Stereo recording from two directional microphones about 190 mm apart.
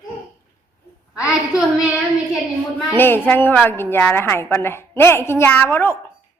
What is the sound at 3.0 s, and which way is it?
A woman's voice, 10° left (ahead or behind).